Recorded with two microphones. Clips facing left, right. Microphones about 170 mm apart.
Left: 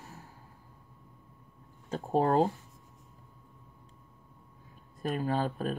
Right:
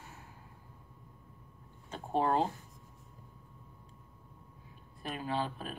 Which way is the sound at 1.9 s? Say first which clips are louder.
Left 4 dB; 40° left (ahead or behind).